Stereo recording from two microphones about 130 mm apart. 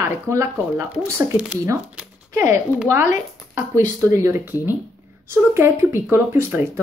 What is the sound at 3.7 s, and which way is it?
Speech, 25° right (ahead or behind).